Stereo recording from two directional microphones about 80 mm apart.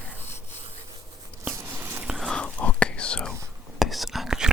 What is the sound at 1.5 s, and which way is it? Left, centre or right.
Biting, right.